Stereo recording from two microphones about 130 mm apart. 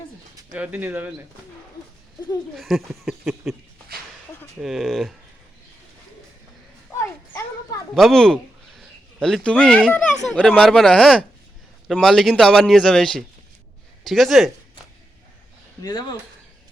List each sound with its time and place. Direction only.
0.3 s speech: 15° right (ahead or behind)
2.6 s speech: centre (ahead or behind)
4.6 s speech: centre (ahead or behind)
7.0 s a sound: 25° left (ahead or behind)
7.9 s a sound: centre (ahead or behind)
9.2 s speech: 5° left (ahead or behind)
15.8 s speech: 30° left (ahead or behind)